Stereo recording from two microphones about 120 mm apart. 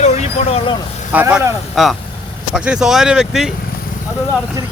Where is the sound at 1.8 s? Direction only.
Centre (ahead or behind).